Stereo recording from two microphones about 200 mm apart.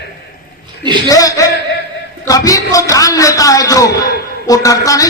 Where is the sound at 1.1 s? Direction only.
15° left (ahead or behind).